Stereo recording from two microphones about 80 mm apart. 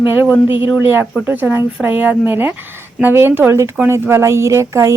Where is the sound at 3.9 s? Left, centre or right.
Right.